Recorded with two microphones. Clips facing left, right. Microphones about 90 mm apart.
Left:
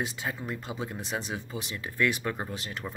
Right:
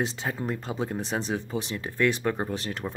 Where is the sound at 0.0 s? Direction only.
30° right (ahead or behind).